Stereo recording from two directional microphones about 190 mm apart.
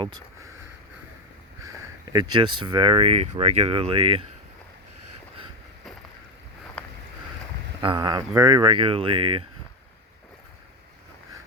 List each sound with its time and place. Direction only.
2.1 s speech: 25° right (ahead or behind)
7.8 s speech: 25° right (ahead or behind)